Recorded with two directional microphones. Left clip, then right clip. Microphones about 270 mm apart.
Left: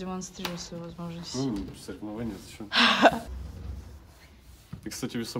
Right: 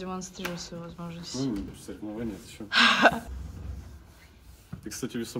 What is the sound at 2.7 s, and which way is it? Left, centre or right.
Speech, centre.